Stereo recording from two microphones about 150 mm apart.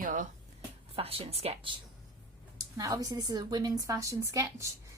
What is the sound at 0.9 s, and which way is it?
Speech, 40° right (ahead or behind).